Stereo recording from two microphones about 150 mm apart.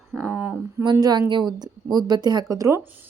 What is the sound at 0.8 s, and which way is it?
Speech, 30° right (ahead or behind).